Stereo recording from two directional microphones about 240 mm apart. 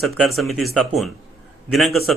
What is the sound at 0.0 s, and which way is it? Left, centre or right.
Speech, centre.